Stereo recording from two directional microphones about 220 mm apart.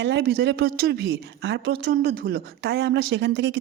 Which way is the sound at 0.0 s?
50° right (ahead or behind).